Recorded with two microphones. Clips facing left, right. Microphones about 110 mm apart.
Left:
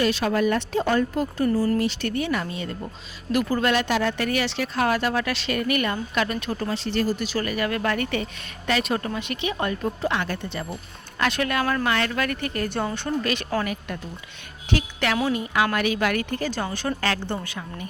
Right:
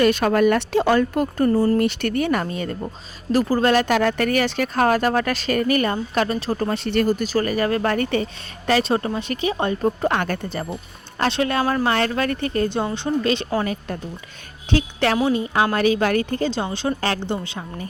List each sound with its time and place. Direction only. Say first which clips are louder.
0.0 s speech: right 5 dB; 55° right (ahead or behind)
6.7 s speech: right 4 dB; 60° right (ahead or behind); by 9.9 s 30° right (ahead or behind)
10.0 s speech: right 4 dB; 50° right (ahead or behind)
11.2 s a woman's voice: right 3 dB; 30° right (ahead or behind)